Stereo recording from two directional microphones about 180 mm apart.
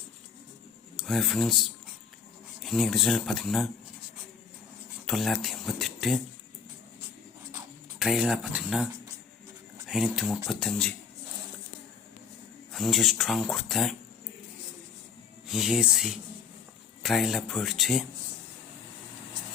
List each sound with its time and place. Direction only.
0.9 s speech: centre (ahead or behind)
5.0 s speech: centre (ahead or behind)
7.9 s speech: 5° right (ahead or behind)
12.7 s speech: centre (ahead or behind)
15.4 s speech: centre (ahead or behind)